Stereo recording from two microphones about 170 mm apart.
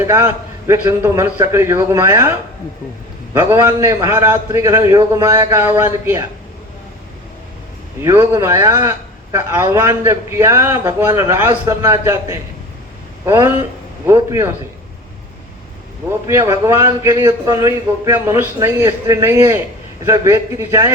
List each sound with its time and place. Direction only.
0.0 s a man's voice: 15° right (ahead or behind)
3.5 s a man's voice: 15° right (ahead or behind)
8.0 s a man's voice: 15° right (ahead or behind)
16.0 s a man's voice: 15° right (ahead or behind)